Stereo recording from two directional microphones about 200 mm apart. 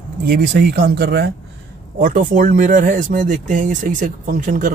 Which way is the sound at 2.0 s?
40° right (ahead or behind).